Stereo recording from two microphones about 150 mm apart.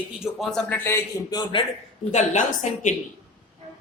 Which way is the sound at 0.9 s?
20° left (ahead or behind).